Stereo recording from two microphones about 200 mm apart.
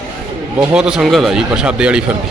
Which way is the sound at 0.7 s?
5° right (ahead or behind).